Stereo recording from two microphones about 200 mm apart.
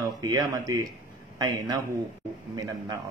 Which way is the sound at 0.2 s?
20° right (ahead or behind).